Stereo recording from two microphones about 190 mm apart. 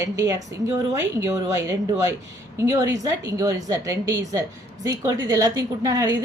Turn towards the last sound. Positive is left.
turn(degrees=-20)  # may be behind; listen again after turning